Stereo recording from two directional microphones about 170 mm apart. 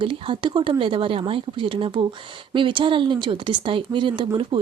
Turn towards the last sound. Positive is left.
turn(degrees=-30)  # may be behind; listen again after turning